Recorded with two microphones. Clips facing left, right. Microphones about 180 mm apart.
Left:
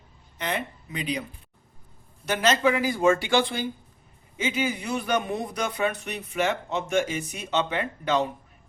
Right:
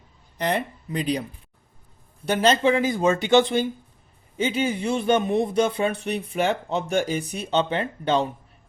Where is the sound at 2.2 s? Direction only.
30° right (ahead or behind).